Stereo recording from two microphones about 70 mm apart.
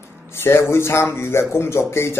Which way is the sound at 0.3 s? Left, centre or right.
Left.